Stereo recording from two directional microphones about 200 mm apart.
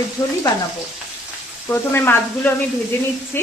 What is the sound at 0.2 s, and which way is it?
Speech, 10° left (ahead or behind).